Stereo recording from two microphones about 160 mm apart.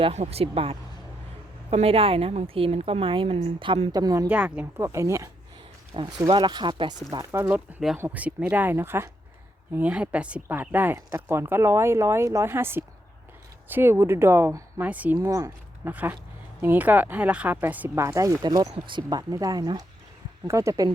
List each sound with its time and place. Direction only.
0.0 s a woman's voice: 40° right (ahead or behind); by 4.3 s 20° right (ahead or behind)
4.3 s speech: 10° right (ahead or behind)
5.9 s speech: 30° right (ahead or behind)